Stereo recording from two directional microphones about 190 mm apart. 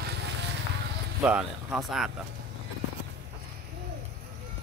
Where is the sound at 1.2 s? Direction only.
5° right (ahead or behind).